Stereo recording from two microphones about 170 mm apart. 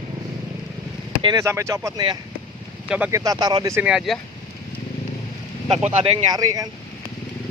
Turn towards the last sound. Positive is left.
turn(degrees=-20)  # may be behind; listen again after turning